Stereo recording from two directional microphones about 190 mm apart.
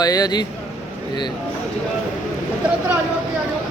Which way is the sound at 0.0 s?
20° left (ahead or behind).